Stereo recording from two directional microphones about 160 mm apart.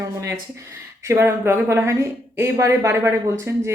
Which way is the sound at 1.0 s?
15° right (ahead or behind).